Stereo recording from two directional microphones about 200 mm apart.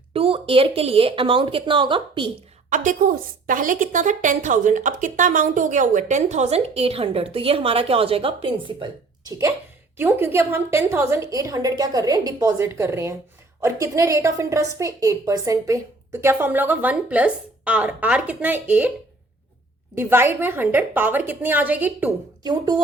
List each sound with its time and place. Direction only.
0.1 s speech: 25° right (ahead or behind)
2.6 s a woman's voice: 40° right (ahead or behind)
10.0 s a woman's voice: 10° right (ahead or behind)
20.0 s a woman's voice: 10° right (ahead or behind)